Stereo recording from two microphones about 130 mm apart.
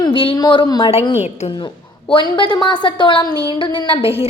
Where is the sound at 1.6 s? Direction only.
40° left (ahead or behind).